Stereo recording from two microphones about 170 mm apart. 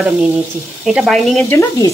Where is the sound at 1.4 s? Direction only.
15° left (ahead or behind).